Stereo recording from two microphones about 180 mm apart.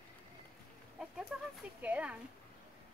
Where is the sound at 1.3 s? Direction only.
5° right (ahead or behind).